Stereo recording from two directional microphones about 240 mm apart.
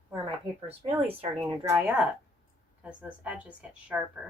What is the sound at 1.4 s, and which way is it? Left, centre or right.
A woman's voice, centre.